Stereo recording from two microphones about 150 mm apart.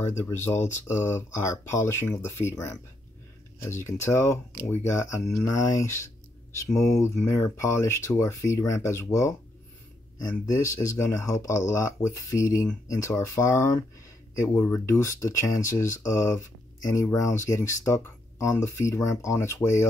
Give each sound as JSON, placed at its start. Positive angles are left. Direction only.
{"t": 0.2, "sound": "speech", "side_deg": 15}
{"t": 10.5, "sound": "speech", "side_deg": 20}